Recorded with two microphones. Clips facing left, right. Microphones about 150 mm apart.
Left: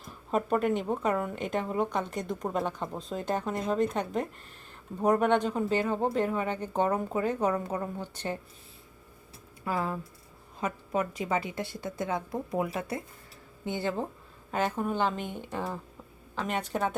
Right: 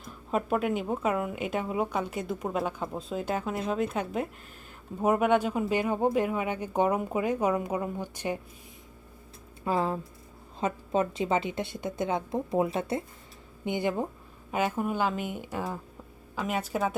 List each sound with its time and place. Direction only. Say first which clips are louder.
0.0 s speech: even; centre (ahead or behind)
9.6 s a woman's voice: right 3 dB; 25° right (ahead or behind); by 16.9 s 5° right (ahead or behind)